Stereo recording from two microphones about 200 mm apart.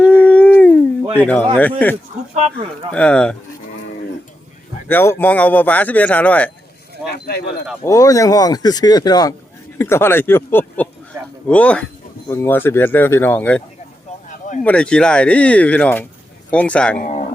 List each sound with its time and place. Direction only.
0.0 s dog: 5° left (ahead or behind)
1.2 s speech: 10° left (ahead or behind)
2.3 s speech: 35° right (ahead or behind)
2.9 s speech: 5° left (ahead or behind)
4.9 s speech: 10° left (ahead or behind)
6.9 s a sound: 55° left (ahead or behind)
7.9 s speech: 15° left (ahead or behind)
14.6 s speech: 5° left (ahead or behind)